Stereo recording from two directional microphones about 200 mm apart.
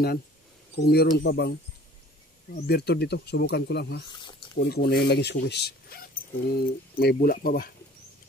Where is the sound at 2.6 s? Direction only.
55° left (ahead or behind).